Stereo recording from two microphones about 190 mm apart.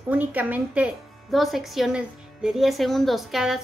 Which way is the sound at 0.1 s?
10° right (ahead or behind).